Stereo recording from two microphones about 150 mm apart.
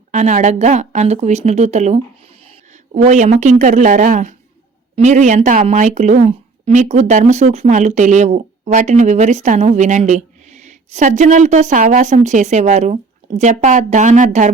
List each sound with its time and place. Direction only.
0.1 s a woman's voice: 50° right (ahead or behind)
2.9 s speech: 55° right (ahead or behind)